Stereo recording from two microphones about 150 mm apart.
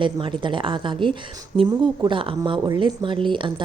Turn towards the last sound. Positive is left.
turn(degrees=-35)  # may be behind; listen again after turning